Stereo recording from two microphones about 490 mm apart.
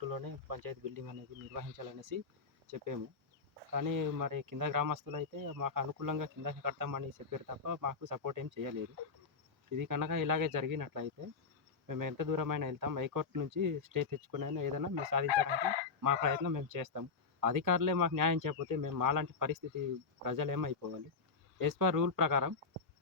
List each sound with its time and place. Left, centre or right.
0.0 s speech: right
9.7 s speech: right
15.3 s chicken: right
16.0 s speech: right